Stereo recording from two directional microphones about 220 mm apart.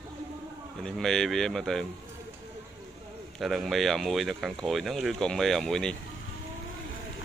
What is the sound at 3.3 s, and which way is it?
Speech, centre (ahead or behind).